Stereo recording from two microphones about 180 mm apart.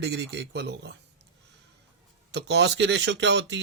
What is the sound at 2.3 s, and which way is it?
Speech, 75° right (ahead or behind).